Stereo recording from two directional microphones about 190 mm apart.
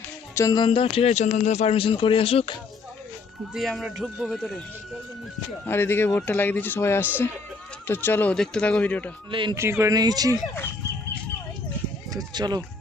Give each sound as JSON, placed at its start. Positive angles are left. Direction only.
{"t": 0.3, "sound": "speech", "side_deg": 20}
{"t": 3.5, "sound": "speech", "side_deg": 0}
{"t": 5.6, "sound": "speech", "side_deg": 10}
{"t": 9.3, "sound": "speech", "side_deg": -25}
{"t": 9.6, "sound": "speech", "side_deg": -15}
{"t": 10.3, "sound": "speech", "side_deg": 10}
{"t": 12.1, "sound": "speech", "side_deg": -20}